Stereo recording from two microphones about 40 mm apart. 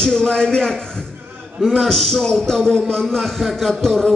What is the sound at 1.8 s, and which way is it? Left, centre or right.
Speech, centre.